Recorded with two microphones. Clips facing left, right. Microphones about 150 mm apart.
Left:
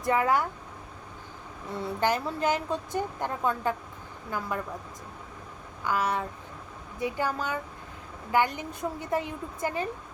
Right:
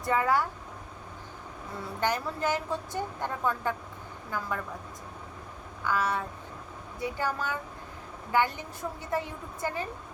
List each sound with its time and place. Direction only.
0.0 s a woman's voice: 15° left (ahead or behind)
2.0 s a woman's voice: 20° left (ahead or behind)
5.8 s a woman's voice: 15° left (ahead or behind)